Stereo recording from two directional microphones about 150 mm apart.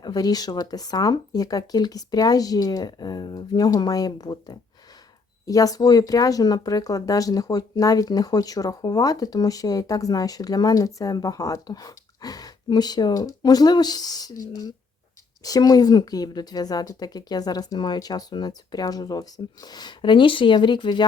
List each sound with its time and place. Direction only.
0.0 s speech: 25° left (ahead or behind)